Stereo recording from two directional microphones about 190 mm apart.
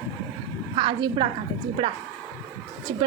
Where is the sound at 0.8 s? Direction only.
25° right (ahead or behind).